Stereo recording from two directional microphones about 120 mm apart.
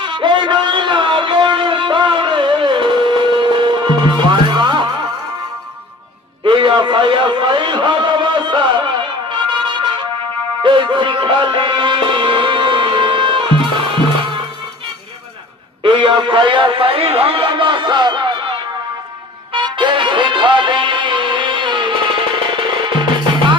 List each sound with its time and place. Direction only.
0.0 s music: 40° right (ahead or behind)
6.4 s a sound: 40° right (ahead or behind)
10.6 s music: 40° right (ahead or behind)
15.8 s a man's voice: 45° right (ahead or behind)
19.5 s music: 45° right (ahead or behind)